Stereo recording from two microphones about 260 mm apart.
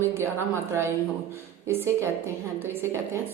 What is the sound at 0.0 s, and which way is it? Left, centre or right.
A woman's voice, centre.